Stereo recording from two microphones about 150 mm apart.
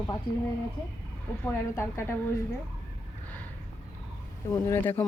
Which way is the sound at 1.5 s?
15° left (ahead or behind).